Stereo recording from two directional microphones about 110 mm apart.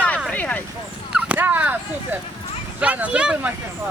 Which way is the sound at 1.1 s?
15° right (ahead or behind).